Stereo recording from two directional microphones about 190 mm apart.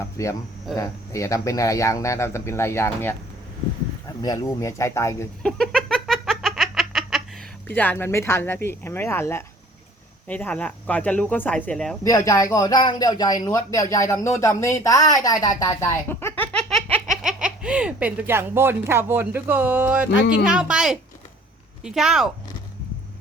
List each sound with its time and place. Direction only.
0.2 s speech: 15° left (ahead or behind)
4.2 s speech: 20° left (ahead or behind)
5.4 s a sound: 5° left (ahead or behind)
7.7 s speech: 10° left (ahead or behind)
12.0 s a man's voice: 20° left (ahead or behind); by 22.3 s centre (ahead or behind)